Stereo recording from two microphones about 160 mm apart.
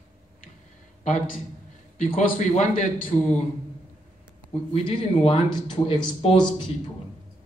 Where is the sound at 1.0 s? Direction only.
45° left (ahead or behind).